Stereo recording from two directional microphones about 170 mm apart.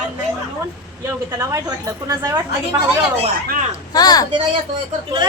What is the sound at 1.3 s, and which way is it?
A woman's voice, 20° right (ahead or behind).